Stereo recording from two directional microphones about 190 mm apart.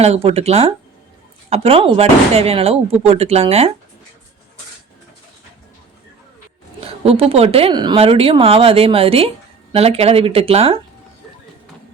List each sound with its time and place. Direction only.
0.0 s speech: 35° right (ahead or behind)
6.8 s speech: 30° right (ahead or behind)